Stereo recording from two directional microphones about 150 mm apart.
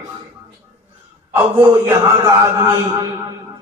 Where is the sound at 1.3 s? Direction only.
15° right (ahead or behind).